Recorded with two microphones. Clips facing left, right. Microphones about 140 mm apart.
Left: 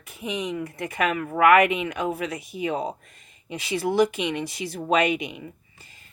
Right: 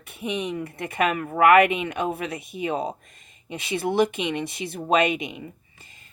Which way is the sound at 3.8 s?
55° right (ahead or behind).